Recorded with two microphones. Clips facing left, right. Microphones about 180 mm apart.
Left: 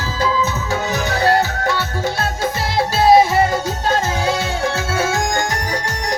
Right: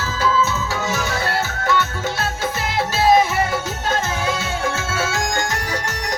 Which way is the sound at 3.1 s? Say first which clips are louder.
Left 5 dB; 35° left (ahead or behind).